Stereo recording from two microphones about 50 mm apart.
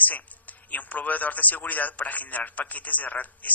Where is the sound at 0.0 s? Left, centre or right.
Left.